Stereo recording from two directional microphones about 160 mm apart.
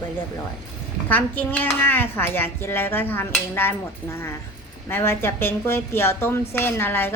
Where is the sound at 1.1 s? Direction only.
10° left (ahead or behind).